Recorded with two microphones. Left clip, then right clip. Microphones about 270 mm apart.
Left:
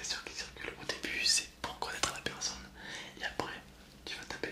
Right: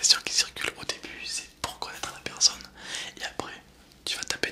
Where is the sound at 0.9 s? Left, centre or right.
Centre.